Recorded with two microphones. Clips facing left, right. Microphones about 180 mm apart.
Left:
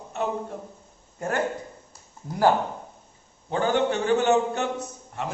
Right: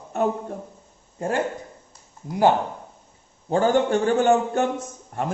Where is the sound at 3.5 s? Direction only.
45° right (ahead or behind).